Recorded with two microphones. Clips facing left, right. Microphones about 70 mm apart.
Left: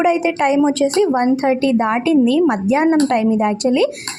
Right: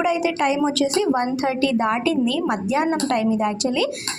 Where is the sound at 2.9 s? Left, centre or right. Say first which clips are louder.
Left 7 dB; left.